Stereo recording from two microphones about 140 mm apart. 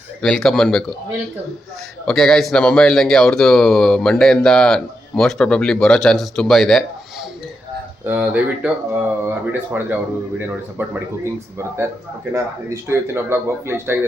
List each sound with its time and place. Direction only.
0.2 s speech: 5° left (ahead or behind)
2.0 s speech: 5° left (ahead or behind)
8.0 s speech: 10° right (ahead or behind)
12.9 s speech: 15° right (ahead or behind)